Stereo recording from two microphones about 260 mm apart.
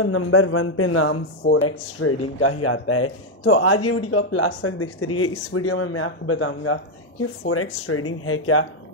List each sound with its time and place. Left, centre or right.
0.0 s speech: left